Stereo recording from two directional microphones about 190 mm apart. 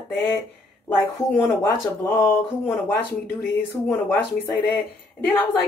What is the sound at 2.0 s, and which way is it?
Speech, 10° left (ahead or behind).